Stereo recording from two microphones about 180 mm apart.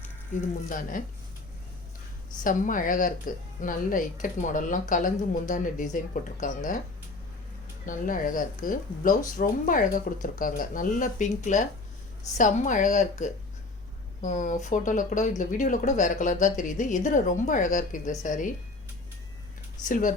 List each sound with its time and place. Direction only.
0.3 s speech: 45° left (ahead or behind)
2.4 s speech: 45° left (ahead or behind)
7.9 s speech: 50° left (ahead or behind)
19.9 s speech: 45° left (ahead or behind)